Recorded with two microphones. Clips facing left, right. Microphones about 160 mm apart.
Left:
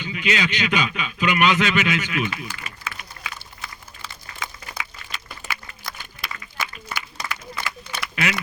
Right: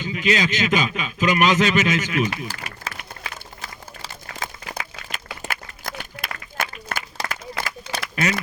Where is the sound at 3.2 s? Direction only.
40° right (ahead or behind).